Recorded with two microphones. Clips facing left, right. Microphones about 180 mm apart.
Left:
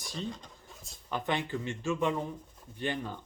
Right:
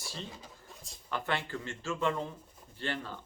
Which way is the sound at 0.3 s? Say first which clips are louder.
Left 7 dB; 5° right (ahead or behind).